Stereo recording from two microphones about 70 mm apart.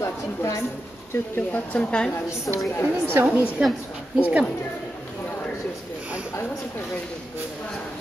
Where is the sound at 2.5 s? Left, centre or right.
Left.